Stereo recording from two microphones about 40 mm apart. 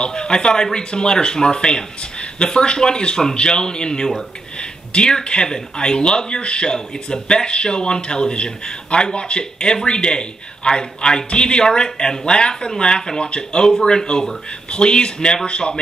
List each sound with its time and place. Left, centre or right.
0.0 s speech: centre
13.2 s speech: left